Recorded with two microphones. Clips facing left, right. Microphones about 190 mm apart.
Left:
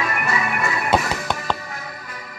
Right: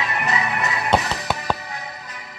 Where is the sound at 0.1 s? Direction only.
20° right (ahead or behind).